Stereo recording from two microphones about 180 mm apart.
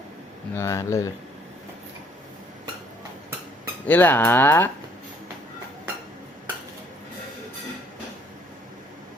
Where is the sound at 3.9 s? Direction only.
10° left (ahead or behind).